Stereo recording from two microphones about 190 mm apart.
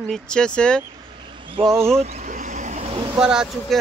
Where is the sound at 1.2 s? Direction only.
25° right (ahead or behind).